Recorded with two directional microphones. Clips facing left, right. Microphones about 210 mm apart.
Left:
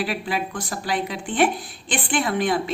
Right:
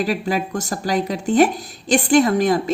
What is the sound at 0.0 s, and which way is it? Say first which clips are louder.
A woman's voice: right 5 dB; 40° right (ahead or behind).